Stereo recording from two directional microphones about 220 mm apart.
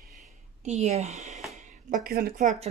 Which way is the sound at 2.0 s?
40° right (ahead or behind).